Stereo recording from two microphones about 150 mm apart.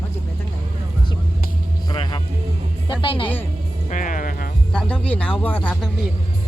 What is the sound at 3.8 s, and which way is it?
Speech, 60° left (ahead or behind).